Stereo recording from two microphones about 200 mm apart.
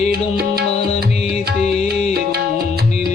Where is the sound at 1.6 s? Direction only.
35° left (ahead or behind).